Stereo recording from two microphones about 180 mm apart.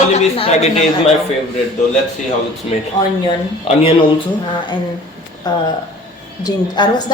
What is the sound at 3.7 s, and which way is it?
Speech, 30° left (ahead or behind).